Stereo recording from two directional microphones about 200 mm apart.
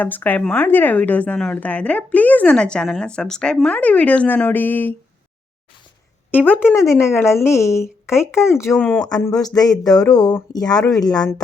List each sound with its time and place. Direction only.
0.0 s a woman's voice: 10° left (ahead or behind)
6.3 s a woman's voice: 10° left (ahead or behind)